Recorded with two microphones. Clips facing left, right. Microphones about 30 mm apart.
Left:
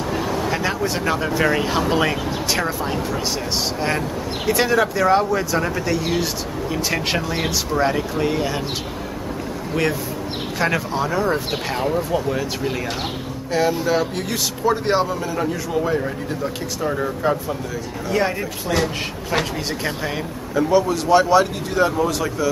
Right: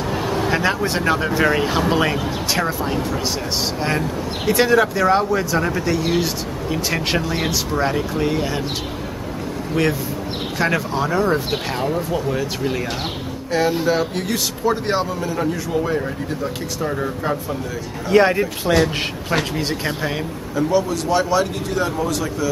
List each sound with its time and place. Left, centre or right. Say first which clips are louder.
0.0 s speech: right 1 dB; centre
10.6 s speech: right 1 dB; centre
18.0 s speech: right 7 dB; right
19.3 s speech: right 1 dB; centre
20.5 s speech: left 2 dB; centre